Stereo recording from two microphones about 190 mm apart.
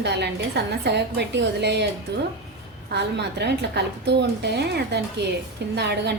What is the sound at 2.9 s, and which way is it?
A woman's voice, 60° right (ahead or behind).